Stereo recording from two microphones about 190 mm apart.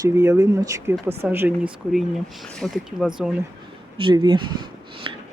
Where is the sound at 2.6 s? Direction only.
Centre (ahead or behind).